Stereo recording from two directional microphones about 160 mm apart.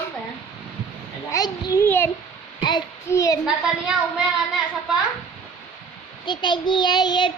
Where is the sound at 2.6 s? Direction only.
25° left (ahead or behind).